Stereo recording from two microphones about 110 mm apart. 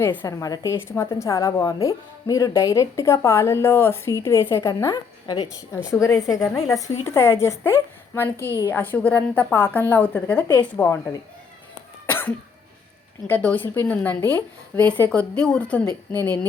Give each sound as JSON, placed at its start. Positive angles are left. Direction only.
{"t": 0.0, "sound": "a woman's voice", "side_deg": 20}
{"t": 12.0, "sound": "cough", "side_deg": 20}
{"t": 13.2, "sound": "a woman's voice", "side_deg": 15}